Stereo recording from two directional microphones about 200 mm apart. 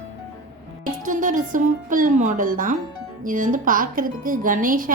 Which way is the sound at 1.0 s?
40° right (ahead or behind).